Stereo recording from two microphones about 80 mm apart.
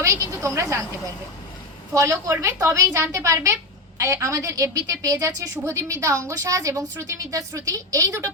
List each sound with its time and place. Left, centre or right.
0.0 s a woman's voice: right
1.9 s a woman's voice: right